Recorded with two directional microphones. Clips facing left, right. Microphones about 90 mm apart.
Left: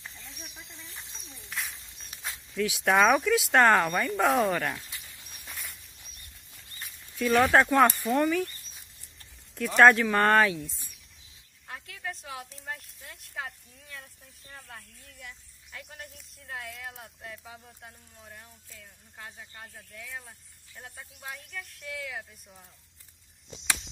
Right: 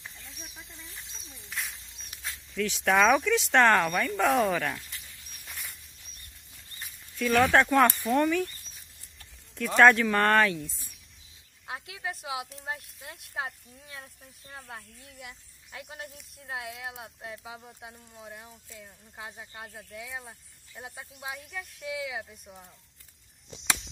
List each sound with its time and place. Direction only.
0.7 s speech: 20° left (ahead or behind)
1.5 s speech: centre (ahead or behind)
5.4 s a sound: centre (ahead or behind)
7.2 s speech: 10° left (ahead or behind)
9.8 s speech: centre (ahead or behind)
11.8 s speech: 15° right (ahead or behind)
17.8 s speech: 10° right (ahead or behind)